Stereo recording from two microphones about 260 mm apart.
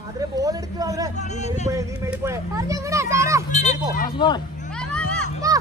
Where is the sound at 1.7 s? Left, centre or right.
Centre.